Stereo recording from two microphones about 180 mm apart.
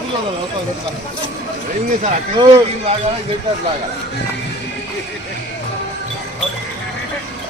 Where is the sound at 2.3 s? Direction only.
30° right (ahead or behind).